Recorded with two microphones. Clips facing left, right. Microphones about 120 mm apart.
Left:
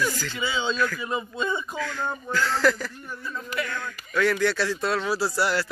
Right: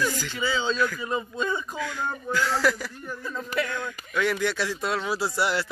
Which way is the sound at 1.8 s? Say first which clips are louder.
Left 1 dB; 15° right (ahead or behind).